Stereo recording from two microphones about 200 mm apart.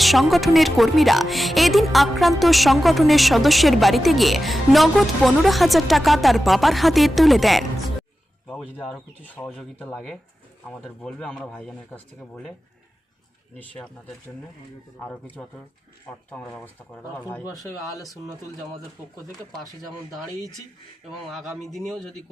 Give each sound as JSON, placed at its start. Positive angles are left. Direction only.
{"t": 0.0, "sound": "speech", "side_deg": 0}
{"t": 13.6, "sound": "speech", "side_deg": 5}
{"t": 15.0, "sound": "speech", "side_deg": 10}
{"t": 21.1, "sound": "speech", "side_deg": 0}